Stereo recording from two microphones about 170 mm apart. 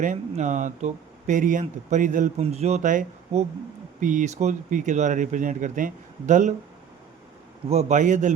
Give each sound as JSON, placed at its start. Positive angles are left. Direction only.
{"t": 0.0, "sound": "speech", "side_deg": -45}
{"t": 2.4, "sound": "speech", "side_deg": -40}
{"t": 7.7, "sound": "speech", "side_deg": -40}